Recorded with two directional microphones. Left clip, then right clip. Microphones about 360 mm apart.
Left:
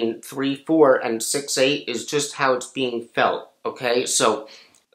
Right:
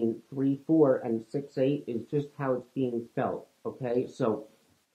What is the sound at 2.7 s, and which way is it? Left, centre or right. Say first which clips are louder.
Speech: left 7 dB; left.